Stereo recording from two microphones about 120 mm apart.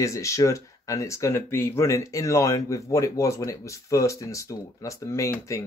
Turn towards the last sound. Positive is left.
turn(degrees=25)  # may be behind; listen again after turning